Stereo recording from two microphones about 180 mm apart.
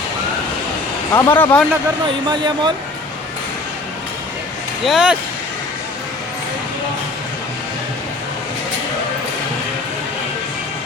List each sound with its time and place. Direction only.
1.1 s speech: 10° left (ahead or behind)
2.3 s speech: 25° right (ahead or behind)
4.9 s speech: 5° right (ahead or behind)